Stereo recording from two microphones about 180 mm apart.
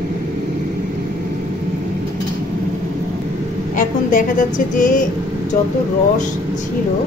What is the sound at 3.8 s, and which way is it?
A woman's voice, 45° left (ahead or behind).